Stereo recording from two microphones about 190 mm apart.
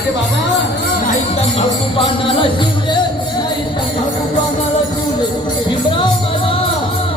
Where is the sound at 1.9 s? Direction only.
30° left (ahead or behind).